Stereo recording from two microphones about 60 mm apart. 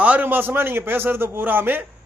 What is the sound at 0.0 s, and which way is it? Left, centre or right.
Speech, right.